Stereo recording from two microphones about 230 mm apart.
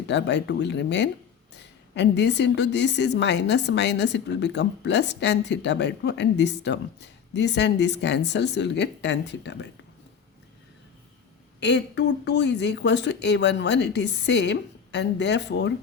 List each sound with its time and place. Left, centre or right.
0.1 s a woman's voice: left
11.6 s a woman's voice: left